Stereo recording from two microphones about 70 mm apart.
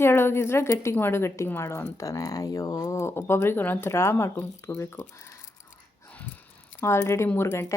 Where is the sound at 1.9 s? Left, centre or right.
Left.